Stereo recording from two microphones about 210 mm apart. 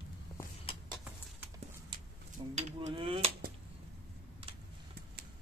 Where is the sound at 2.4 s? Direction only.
25° right (ahead or behind).